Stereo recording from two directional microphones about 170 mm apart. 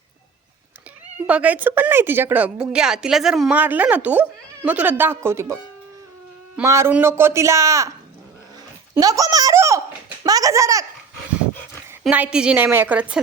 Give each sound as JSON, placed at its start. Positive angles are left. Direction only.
{"t": 1.3, "sound": "speech", "side_deg": -10}
{"t": 6.6, "sound": "speech", "side_deg": -15}
{"t": 9.0, "sound": "speech", "side_deg": -20}
{"t": 12.0, "sound": "speech", "side_deg": -5}